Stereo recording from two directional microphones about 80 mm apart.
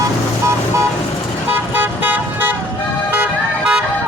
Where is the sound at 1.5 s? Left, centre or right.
Right.